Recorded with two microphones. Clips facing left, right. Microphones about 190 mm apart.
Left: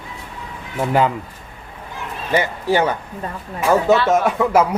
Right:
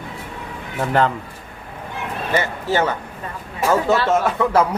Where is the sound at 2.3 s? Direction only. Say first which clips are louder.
Left 3 dB; 15° left (ahead or behind).